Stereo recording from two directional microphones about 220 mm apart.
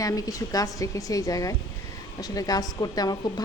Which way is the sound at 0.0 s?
15° left (ahead or behind).